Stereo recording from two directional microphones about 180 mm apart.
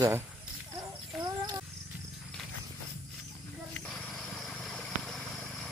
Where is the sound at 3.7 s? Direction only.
5° left (ahead or behind).